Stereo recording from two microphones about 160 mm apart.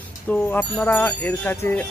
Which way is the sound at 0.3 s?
10° left (ahead or behind).